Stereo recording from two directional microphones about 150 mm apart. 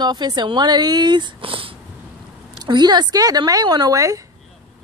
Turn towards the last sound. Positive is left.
turn(degrees=-20)  # may be behind; listen again after turning